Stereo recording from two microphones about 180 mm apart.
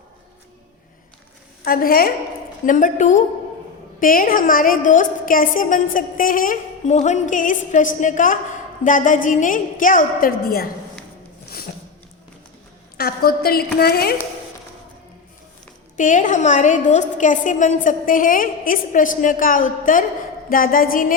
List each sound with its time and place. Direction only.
1.6 s a woman's voice: 55° left (ahead or behind)
13.0 s a woman's voice: 55° left (ahead or behind)
16.0 s a woman's voice: 45° left (ahead or behind)